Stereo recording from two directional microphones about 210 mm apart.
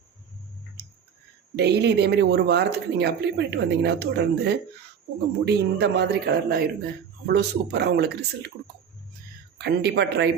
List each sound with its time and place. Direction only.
1.5 s speech: 50° right (ahead or behind)
9.6 s speech: 50° right (ahead or behind)